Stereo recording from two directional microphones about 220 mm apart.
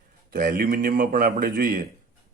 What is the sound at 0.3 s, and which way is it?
Speech, 40° right (ahead or behind).